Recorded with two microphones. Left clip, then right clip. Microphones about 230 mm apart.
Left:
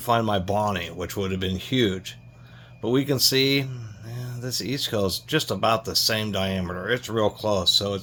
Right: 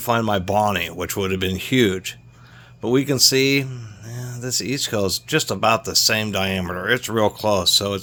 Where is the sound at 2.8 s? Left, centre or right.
Right.